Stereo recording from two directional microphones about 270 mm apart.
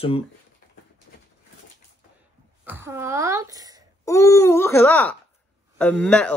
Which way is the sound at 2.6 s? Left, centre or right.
Centre.